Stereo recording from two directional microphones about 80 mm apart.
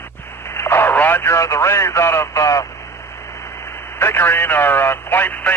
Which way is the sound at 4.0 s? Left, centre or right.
Left.